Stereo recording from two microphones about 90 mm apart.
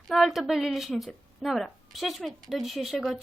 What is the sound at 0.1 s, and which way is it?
Speech, centre (ahead or behind).